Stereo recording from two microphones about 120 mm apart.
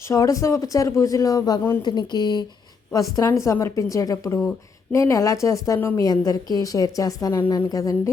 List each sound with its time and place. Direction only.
0.1 s a woman's voice: 30° left (ahead or behind)